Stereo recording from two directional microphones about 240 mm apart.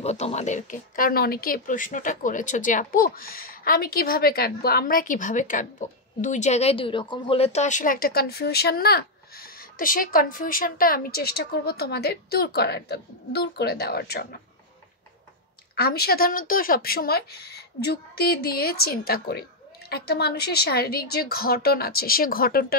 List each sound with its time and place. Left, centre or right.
0.0 s speech: left
15.7 s speech: left